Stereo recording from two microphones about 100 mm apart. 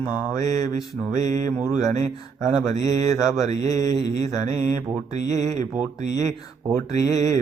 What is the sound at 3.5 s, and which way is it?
Speech, 35° left (ahead or behind).